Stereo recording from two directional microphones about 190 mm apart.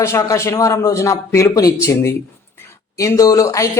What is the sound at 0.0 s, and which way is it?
Speech, 15° left (ahead or behind).